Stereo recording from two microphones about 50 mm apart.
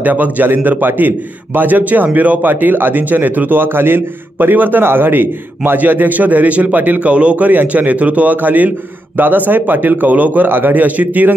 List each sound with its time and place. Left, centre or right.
0.0 s a man's voice: right